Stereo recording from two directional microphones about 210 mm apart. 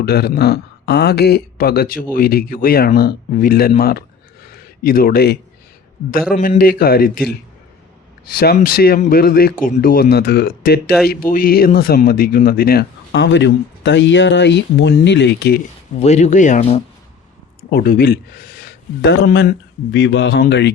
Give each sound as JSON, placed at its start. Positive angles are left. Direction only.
{"t": 0.0, "sound": "a man's voice", "side_deg": 50}
{"t": 8.4, "sound": "a man's voice", "side_deg": 45}
{"t": 16.0, "sound": "speech", "side_deg": 30}
{"t": 17.7, "sound": "a man's voice", "side_deg": 45}